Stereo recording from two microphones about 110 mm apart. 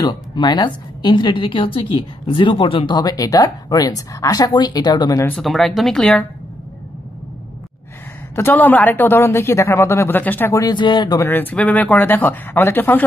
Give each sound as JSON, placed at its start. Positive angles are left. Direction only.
{"t": 0.0, "sound": "a woman's voice", "side_deg": 40}
{"t": 5.4, "sound": "speech", "side_deg": 0}
{"t": 8.4, "sound": "a woman's voice", "side_deg": 20}
{"t": 10.5, "sound": "a woman's voice", "side_deg": 35}
{"t": 11.1, "sound": "speech", "side_deg": 20}